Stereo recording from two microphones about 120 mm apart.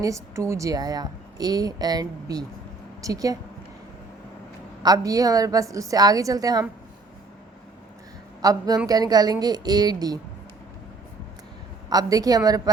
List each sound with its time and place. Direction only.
0.0 s a woman's voice: 25° right (ahead or behind)
4.8 s a woman's voice: 30° right (ahead or behind)
8.4 s a woman's voice: 30° right (ahead or behind)
11.9 s a woman's voice: 30° right (ahead or behind)